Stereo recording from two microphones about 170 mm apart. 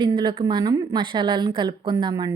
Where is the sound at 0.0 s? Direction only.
25° right (ahead or behind).